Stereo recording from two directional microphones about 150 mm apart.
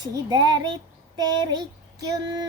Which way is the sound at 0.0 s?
30° right (ahead or behind).